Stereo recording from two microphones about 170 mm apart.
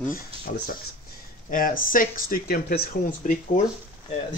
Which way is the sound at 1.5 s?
55° left (ahead or behind).